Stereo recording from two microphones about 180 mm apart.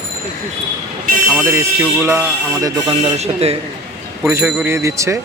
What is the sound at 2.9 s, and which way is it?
Speech, 30° right (ahead or behind).